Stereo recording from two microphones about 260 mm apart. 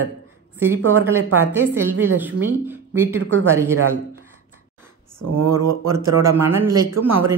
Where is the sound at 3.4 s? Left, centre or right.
Centre.